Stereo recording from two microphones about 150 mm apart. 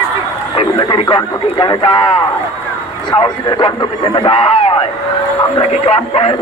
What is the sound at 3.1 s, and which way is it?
Speech, 35° left (ahead or behind).